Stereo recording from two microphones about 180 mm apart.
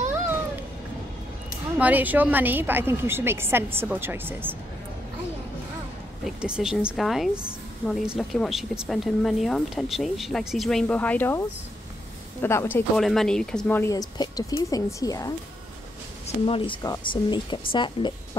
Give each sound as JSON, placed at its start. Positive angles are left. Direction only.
{"t": 1.8, "sound": "a woman's voice", "side_deg": -10}
{"t": 6.2, "sound": "speech", "side_deg": -5}
{"t": 16.4, "sound": "speech", "side_deg": 30}